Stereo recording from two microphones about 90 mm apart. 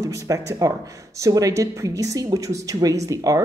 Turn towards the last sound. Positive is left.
turn(degrees=-40)  # may be behind; listen again after turning